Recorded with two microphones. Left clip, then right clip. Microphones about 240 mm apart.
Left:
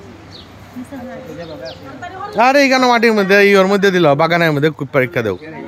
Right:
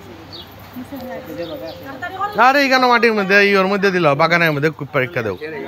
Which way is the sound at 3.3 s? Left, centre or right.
Left.